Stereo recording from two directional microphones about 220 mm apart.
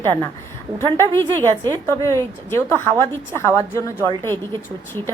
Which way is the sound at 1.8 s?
15° left (ahead or behind).